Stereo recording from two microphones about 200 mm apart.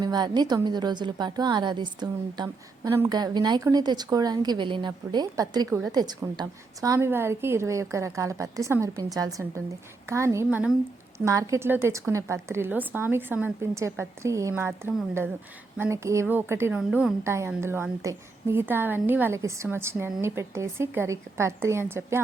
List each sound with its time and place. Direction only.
0.0 s a woman's voice: 20° right (ahead or behind)